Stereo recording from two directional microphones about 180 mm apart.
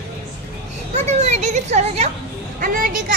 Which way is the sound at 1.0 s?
40° right (ahead or behind).